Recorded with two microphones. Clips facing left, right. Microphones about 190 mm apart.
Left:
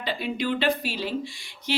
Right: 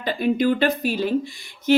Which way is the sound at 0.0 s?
45° right (ahead or behind).